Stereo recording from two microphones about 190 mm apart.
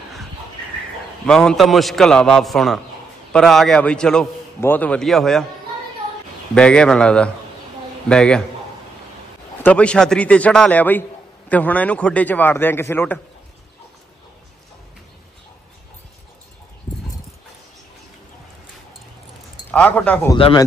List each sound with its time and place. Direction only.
1.2 s a man's voice: 5° left (ahead or behind)
6.5 s a man's voice: 5° left (ahead or behind)
9.6 s a man's voice: 5° left (ahead or behind)
19.7 s a man's voice: 5° left (ahead or behind)
20.3 s speech: 30° left (ahead or behind)